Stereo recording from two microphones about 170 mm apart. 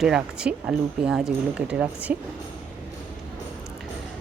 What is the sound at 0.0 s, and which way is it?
Speech, 5° right (ahead or behind).